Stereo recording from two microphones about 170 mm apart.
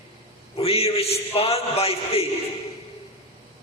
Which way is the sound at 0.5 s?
35° left (ahead or behind).